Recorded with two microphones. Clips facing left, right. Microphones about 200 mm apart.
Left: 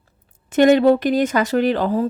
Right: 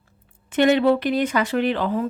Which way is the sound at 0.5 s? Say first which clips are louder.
Left 4 dB; 45° left (ahead or behind).